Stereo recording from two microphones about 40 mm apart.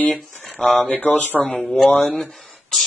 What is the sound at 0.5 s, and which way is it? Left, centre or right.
Speech, centre.